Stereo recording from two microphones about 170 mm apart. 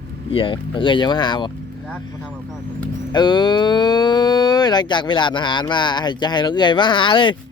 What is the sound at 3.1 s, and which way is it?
Speech, 25° left (ahead or behind).